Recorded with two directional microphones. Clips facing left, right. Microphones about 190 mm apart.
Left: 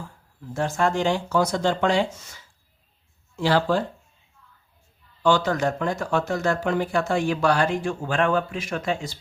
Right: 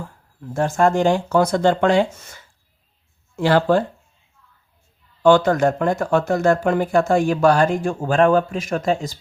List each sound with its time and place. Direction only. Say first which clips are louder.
0.5 s speech: right 6 dB; 45° right (ahead or behind)
5.2 s speech: right 7 dB; 55° right (ahead or behind)